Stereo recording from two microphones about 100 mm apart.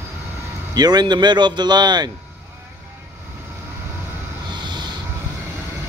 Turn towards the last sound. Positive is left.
turn(degrees=-50)  # may be behind; listen again after turning